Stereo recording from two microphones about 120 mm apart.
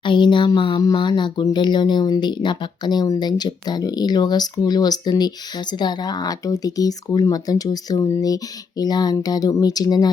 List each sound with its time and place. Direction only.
0.0 s speech: 40° left (ahead or behind)